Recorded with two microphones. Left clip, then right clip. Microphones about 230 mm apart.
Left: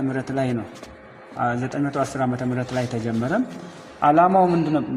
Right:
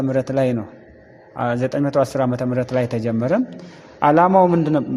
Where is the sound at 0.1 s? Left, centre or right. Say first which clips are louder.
Right 6 dB; right.